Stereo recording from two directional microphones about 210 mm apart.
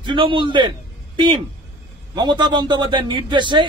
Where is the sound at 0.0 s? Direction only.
25° right (ahead or behind).